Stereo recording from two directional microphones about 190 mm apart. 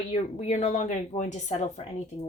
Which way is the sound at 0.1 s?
35° left (ahead or behind).